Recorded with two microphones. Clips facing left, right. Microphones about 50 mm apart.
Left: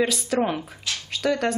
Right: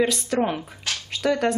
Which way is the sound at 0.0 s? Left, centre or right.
Centre.